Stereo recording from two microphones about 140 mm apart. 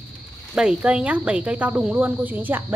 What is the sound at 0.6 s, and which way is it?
Speech, 5° right (ahead or behind).